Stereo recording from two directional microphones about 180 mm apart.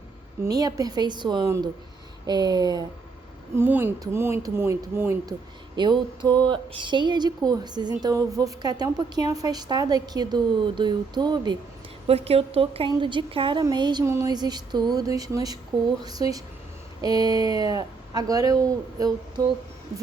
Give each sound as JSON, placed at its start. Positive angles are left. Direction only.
{"t": 0.4, "sound": "a woman's voice", "side_deg": -20}
{"t": 3.5, "sound": "a woman's voice", "side_deg": -10}